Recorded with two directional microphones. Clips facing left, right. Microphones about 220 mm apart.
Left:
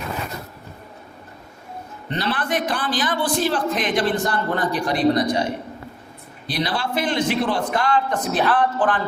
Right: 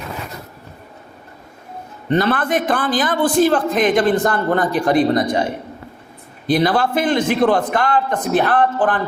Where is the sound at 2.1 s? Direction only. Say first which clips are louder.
Right 7 dB; 50° right (ahead or behind).